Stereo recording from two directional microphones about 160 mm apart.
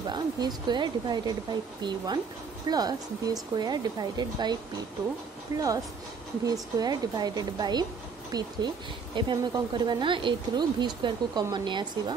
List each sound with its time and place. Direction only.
0.1 s a woman's voice: 25° right (ahead or behind)